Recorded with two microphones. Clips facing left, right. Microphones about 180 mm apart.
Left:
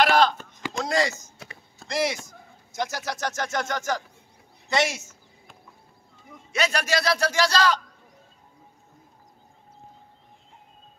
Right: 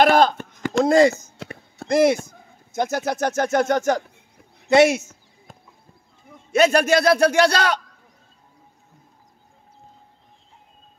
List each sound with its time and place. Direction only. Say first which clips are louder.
0.0 s chopping: right 4 dB; 50° right (ahead or behind)
0.8 s a man's voice: right 10 dB; 55° right (ahead or behind)
5.5 s clip-clop: right 5 dB; 45° right (ahead or behind)
6.5 s a man's voice: right 9 dB; 50° right (ahead or behind)